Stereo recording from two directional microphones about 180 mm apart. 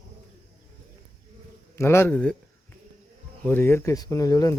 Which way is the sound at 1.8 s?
15° left (ahead or behind).